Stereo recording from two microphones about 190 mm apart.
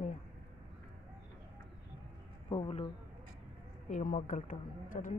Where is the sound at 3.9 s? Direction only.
40° left (ahead or behind).